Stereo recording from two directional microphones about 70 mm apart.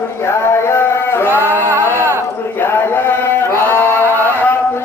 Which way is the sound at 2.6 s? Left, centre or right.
Left.